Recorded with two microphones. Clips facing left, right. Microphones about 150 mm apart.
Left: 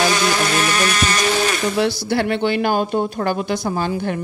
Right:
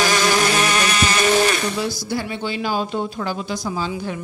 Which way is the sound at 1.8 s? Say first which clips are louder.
Left 6 dB; 65° left (ahead or behind).